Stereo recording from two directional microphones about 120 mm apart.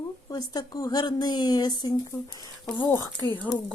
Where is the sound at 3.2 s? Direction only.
30° left (ahead or behind).